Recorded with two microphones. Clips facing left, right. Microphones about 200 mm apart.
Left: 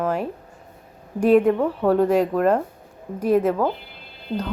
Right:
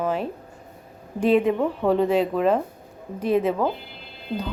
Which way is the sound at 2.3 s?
10° left (ahead or behind).